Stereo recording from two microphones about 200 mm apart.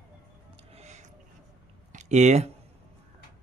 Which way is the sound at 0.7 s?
35° right (ahead or behind).